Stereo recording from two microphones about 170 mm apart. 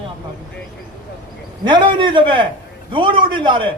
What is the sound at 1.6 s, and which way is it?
A man's voice, 30° right (ahead or behind).